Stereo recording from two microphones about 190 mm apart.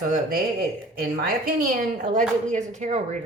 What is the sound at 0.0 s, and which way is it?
A woman's voice, 50° right (ahead or behind).